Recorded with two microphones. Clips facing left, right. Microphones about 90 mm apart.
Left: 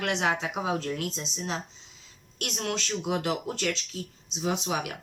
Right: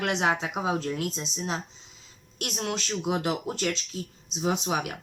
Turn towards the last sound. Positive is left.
turn(degrees=-25)  # may be behind; listen again after turning